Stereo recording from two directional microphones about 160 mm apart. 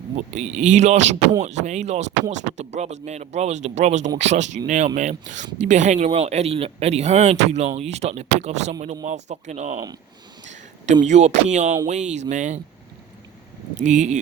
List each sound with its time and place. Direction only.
0.2 s speech: 45° right (ahead or behind)
11.0 s speech: 45° right (ahead or behind)
13.8 s speech: 50° right (ahead or behind)